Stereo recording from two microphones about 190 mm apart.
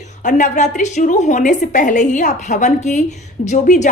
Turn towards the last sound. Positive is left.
turn(degrees=40)  # may be behind; listen again after turning